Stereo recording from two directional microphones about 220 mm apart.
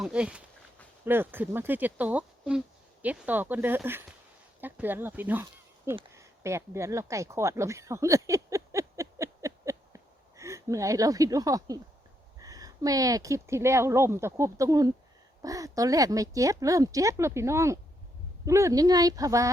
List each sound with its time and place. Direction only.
0.0 s speech: 5° right (ahead or behind)
6.1 s a sound: 15° right (ahead or behind)
12.4 s speech: 15° right (ahead or behind)